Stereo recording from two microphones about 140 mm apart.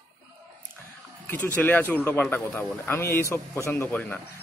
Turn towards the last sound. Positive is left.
turn(degrees=10)  # may be behind; listen again after turning